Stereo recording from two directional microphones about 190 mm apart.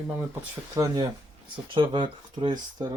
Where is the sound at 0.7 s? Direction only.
20° right (ahead or behind).